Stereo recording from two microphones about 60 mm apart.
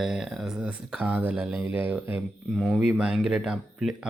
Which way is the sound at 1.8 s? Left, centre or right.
Right.